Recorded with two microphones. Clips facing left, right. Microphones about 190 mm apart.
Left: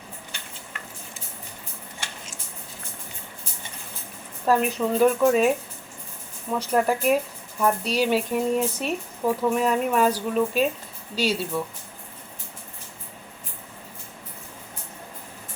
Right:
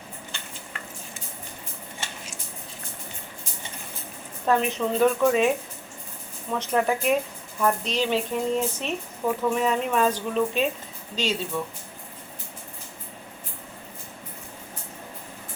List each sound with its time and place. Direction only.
4.4 s a woman's voice: 5° left (ahead or behind)
6.7 s a woman's voice: 5° left (ahead or behind)